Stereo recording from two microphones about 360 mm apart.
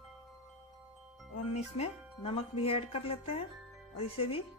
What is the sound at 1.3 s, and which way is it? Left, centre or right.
Speech, centre.